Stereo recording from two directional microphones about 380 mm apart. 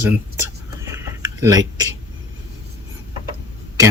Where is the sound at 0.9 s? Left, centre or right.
Centre.